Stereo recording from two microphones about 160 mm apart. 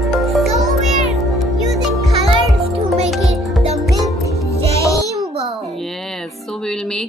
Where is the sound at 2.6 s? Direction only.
40° right (ahead or behind).